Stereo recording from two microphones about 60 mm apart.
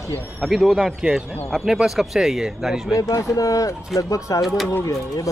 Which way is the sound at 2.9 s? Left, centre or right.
Left.